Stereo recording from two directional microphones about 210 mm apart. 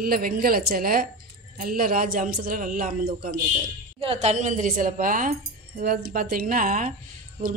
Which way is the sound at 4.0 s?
30° right (ahead or behind).